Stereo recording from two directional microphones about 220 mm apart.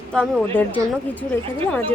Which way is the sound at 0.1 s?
5° left (ahead or behind).